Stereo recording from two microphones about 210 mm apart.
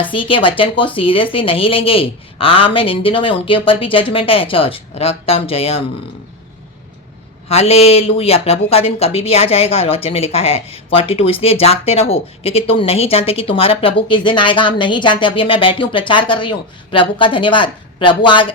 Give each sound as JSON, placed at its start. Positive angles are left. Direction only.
{"t": 0.0, "sound": "speech", "side_deg": 25}
{"t": 7.4, "sound": "speech", "side_deg": 30}